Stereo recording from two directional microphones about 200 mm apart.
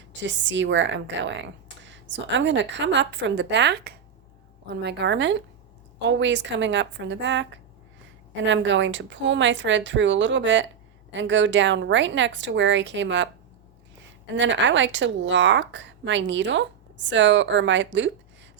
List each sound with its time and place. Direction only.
0.1 s speech: 65° right (ahead or behind)
14.3 s speech: 65° right (ahead or behind)